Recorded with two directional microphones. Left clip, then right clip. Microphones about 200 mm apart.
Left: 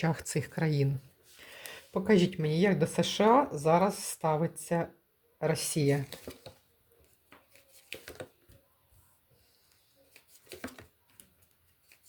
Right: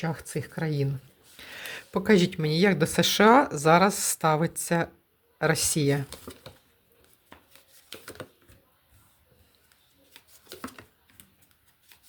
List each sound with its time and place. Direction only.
0.0 s speech: 5° left (ahead or behind)
1.4 s speech: 20° right (ahead or behind)
10.6 s typing: centre (ahead or behind)